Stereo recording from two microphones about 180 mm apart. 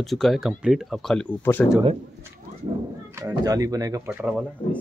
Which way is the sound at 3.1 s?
20° right (ahead or behind).